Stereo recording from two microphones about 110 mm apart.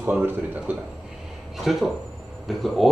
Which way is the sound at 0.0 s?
15° right (ahead or behind).